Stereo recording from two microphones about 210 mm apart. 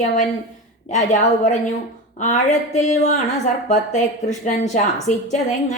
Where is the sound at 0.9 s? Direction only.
35° left (ahead or behind).